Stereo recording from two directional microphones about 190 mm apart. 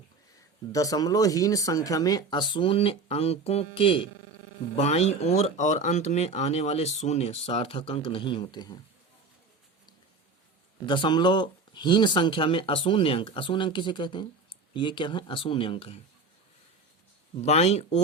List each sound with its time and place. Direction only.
0.7 s speech: 20° left (ahead or behind)
10.8 s speech: 25° left (ahead or behind)
17.4 s speech: 35° left (ahead or behind)